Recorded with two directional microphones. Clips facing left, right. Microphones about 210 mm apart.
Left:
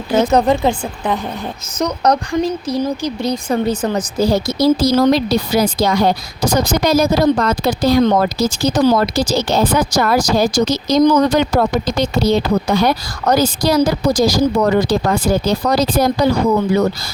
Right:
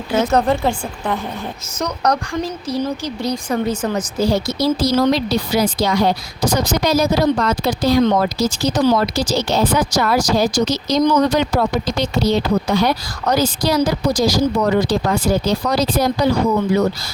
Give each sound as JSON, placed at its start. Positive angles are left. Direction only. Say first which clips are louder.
{"t": 0.2, "sound": "speech", "louder": "left 3 dB", "side_deg": 15}
{"t": 3.5, "sound": "speech", "louder": "left 3 dB", "side_deg": 30}